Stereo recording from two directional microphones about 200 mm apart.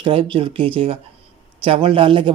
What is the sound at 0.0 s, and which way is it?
Speech, 25° right (ahead or behind).